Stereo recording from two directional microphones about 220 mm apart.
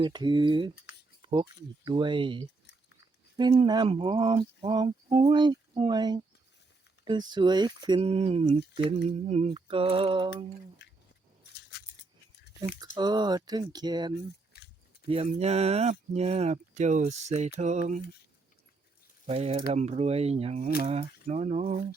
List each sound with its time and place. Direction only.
0.0 s speech: 20° right (ahead or behind)
12.8 s speech: 20° right (ahead or behind)
14.5 s a sound: 45° left (ahead or behind)
15.0 s speech: 25° right (ahead or behind)
19.2 s speech: 25° right (ahead or behind)